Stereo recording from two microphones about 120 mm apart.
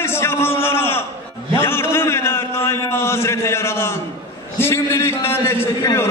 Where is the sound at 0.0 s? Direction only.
20° left (ahead or behind).